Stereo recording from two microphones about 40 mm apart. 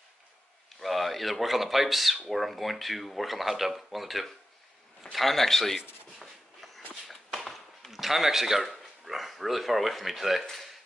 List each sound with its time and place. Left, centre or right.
0.7 s a man's voice: centre
6.1 s walk: centre
7.9 s speech: centre